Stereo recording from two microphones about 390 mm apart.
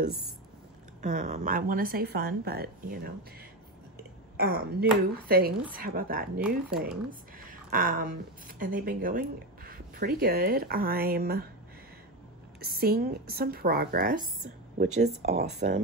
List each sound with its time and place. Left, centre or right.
1.0 s speech: centre
4.4 s a woman's voice: right
12.5 s speech: right